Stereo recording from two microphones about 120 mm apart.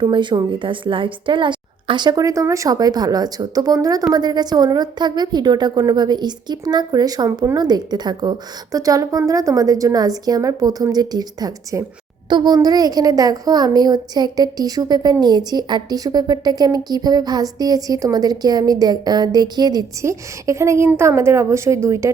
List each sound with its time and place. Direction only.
0.0 s a woman's voice: 40° right (ahead or behind); by 22.1 s 25° right (ahead or behind)